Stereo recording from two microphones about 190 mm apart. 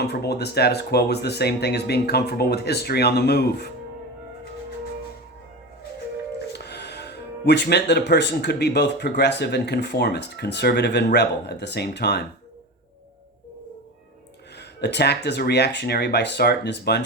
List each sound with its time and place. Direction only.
0.0 s speech: 60° left (ahead or behind)
6.5 s speech: 60° left (ahead or behind)
14.6 s speech: 60° left (ahead or behind)